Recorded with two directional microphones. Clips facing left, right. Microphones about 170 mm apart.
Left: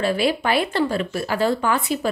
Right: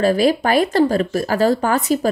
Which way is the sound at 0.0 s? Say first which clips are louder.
Right 5 dB; 40° right (ahead or behind).